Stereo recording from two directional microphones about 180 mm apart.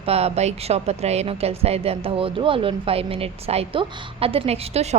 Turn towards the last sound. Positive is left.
turn(degrees=-35)  # may be behind; listen again after turning